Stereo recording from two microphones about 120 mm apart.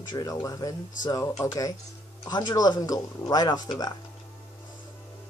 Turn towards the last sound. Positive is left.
turn(degrees=30)  # may be behind; listen again after turning